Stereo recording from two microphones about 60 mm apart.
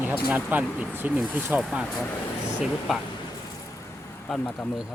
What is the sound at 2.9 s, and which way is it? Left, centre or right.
Speech, centre.